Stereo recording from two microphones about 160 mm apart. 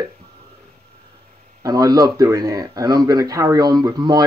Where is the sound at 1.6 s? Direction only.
20° right (ahead or behind).